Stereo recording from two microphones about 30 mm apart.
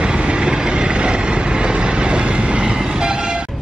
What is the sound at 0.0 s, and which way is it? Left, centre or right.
Vehicle, right.